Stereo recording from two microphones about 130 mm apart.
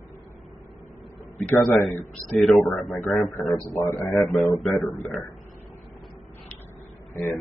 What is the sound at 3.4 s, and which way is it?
Speech, 25° left (ahead or behind).